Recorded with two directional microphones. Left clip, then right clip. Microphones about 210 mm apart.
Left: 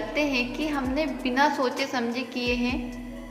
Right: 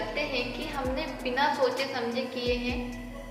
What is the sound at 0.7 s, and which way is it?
A woman's voice, 55° left (ahead or behind).